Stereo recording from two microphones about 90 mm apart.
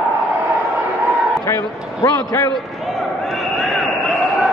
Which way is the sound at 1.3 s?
30° left (ahead or behind).